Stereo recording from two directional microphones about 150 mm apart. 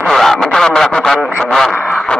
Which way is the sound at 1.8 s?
10° left (ahead or behind).